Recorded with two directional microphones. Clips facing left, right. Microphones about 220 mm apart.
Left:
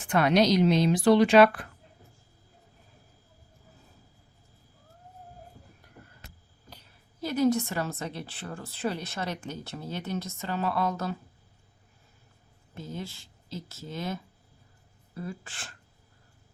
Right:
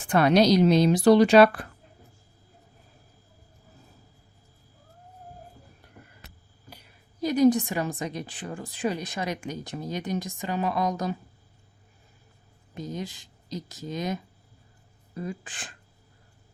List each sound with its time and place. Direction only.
0.0 s a woman's voice: 35° right (ahead or behind)
6.7 s a woman's voice: 10° right (ahead or behind)
12.7 s a woman's voice: 15° right (ahead or behind)